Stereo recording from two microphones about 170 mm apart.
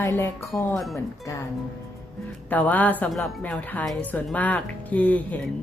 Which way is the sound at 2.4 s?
10° left (ahead or behind).